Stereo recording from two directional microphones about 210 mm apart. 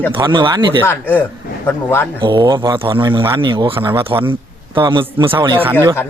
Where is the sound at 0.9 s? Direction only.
10° left (ahead or behind).